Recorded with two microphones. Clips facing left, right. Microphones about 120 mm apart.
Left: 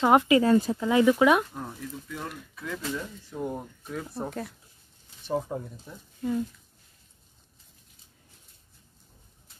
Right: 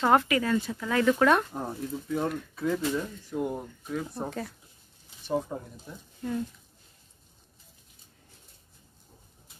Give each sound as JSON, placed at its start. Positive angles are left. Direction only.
{"t": 0.0, "sound": "speech", "side_deg": 15}
{"t": 0.4, "sound": "speech", "side_deg": 35}
{"t": 0.8, "sound": "speech", "side_deg": 15}
{"t": 1.5, "sound": "speech", "side_deg": -30}
{"t": 3.0, "sound": "speech", "side_deg": -10}